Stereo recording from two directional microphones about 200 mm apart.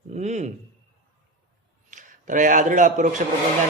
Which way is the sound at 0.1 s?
35° right (ahead or behind).